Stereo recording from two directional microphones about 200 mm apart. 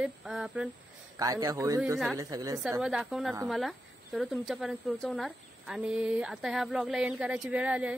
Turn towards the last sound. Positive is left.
turn(degrees=-5)  # may be behind; listen again after turning